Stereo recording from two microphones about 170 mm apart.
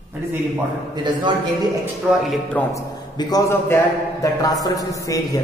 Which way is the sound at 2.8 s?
25° left (ahead or behind).